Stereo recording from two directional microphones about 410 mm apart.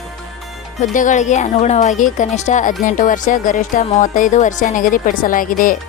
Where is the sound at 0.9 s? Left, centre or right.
Centre.